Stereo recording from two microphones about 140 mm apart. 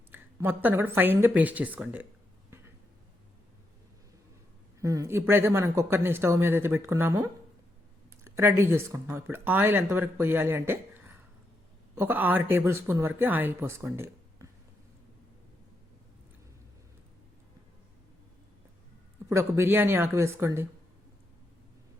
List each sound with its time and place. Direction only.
0.1 s speech: 15° right (ahead or behind)
4.8 s speech: 20° right (ahead or behind)
19.3 s speech: 20° right (ahead or behind)